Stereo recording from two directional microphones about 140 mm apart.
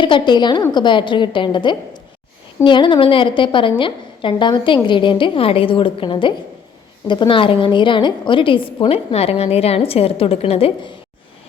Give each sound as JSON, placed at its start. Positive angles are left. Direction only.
{"t": 0.0, "sound": "a woman's voice", "side_deg": 35}